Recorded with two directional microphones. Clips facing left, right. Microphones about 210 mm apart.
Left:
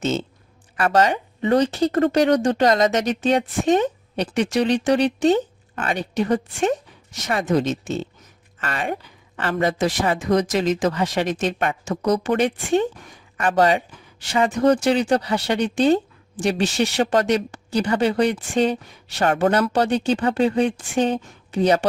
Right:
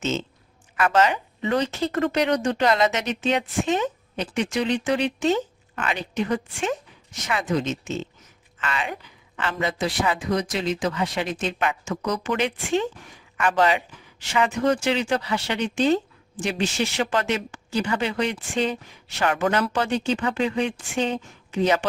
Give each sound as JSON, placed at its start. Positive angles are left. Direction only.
{"t": 0.8, "sound": "speech", "side_deg": 35}
{"t": 1.4, "sound": "speech", "side_deg": 45}